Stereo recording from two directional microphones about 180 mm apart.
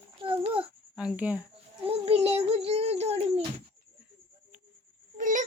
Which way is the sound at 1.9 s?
35° right (ahead or behind).